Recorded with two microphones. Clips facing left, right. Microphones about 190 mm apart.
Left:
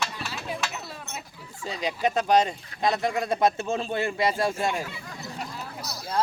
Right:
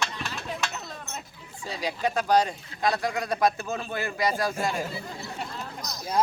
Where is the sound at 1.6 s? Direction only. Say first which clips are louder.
Left 2 dB; 20° left (ahead or behind).